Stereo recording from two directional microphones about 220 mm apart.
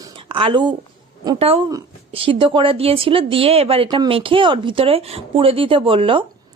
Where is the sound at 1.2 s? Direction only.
20° right (ahead or behind).